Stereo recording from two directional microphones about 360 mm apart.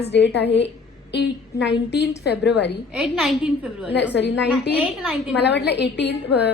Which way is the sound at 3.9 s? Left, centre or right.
Left.